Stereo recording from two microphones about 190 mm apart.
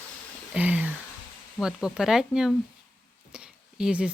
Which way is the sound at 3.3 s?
5° right (ahead or behind).